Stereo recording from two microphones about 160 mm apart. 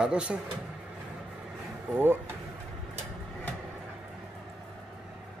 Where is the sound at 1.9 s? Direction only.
15° right (ahead or behind).